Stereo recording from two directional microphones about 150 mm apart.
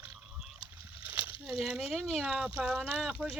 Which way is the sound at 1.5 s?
Centre (ahead or behind).